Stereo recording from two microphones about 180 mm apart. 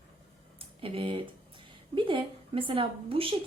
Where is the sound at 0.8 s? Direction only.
30° right (ahead or behind).